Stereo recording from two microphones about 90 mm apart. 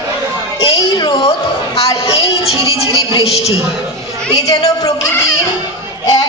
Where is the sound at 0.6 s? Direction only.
75° left (ahead or behind).